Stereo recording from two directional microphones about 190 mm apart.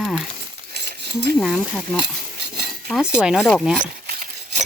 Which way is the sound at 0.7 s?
60° right (ahead or behind).